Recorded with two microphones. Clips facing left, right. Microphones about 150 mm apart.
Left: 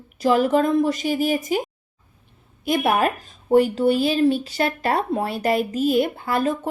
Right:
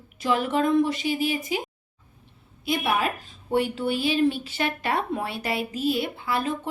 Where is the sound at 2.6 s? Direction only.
50° left (ahead or behind).